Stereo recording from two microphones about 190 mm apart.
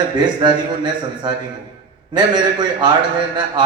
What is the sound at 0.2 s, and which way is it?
A man's voice, 25° right (ahead or behind).